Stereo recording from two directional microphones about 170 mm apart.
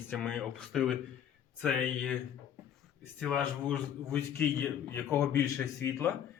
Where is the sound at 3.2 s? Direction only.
5° left (ahead or behind).